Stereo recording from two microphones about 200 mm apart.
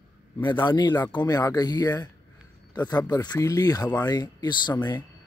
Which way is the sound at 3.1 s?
20° left (ahead or behind).